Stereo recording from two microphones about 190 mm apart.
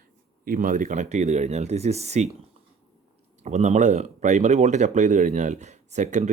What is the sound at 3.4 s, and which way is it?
Speech, 35° right (ahead or behind).